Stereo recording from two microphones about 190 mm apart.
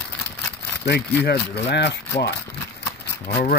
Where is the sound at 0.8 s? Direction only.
60° left (ahead or behind).